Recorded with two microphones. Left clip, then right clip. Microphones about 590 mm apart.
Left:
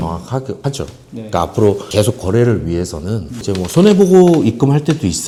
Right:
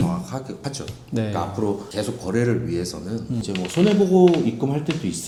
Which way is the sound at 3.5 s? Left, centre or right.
Left.